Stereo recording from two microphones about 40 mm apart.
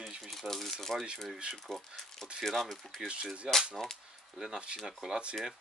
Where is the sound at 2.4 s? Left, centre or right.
Centre.